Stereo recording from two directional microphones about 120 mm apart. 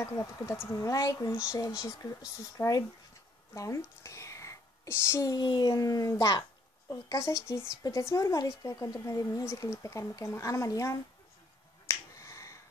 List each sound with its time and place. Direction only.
0.0 s speech: 25° left (ahead or behind)
5.3 s a child's voice: 35° left (ahead or behind)
11.8 s finger snapping: 25° left (ahead or behind)